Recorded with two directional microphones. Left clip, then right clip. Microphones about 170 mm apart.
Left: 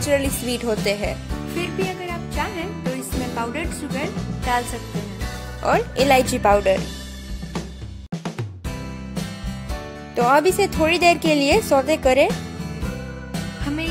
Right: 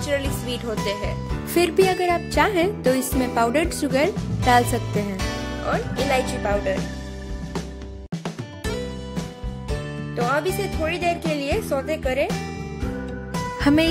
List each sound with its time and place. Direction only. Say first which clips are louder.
0.0 s speech: left 4 dB; 35° left (ahead or behind)
1.6 s music: right 8 dB; 40° right (ahead or behind)
3.3 s music: right 8 dB; 30° right (ahead or behind)
5.7 s speech: left 6 dB; 45° left (ahead or behind)
10.1 s speech: left 6 dB; 45° left (ahead or behind)
13.6 s music: right 10 dB; 45° right (ahead or behind)